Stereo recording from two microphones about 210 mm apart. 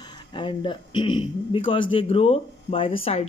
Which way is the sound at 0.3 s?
25° left (ahead or behind).